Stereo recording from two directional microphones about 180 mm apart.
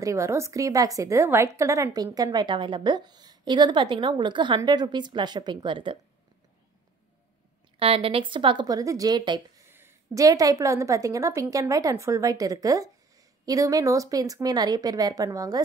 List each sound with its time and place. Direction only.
0.0 s a woman's voice: 15° right (ahead or behind)
7.8 s a woman's voice: 30° right (ahead or behind)
9.7 s a woman's voice: 15° right (ahead or behind)